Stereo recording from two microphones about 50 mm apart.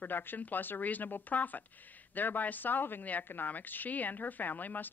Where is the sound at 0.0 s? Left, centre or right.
Left.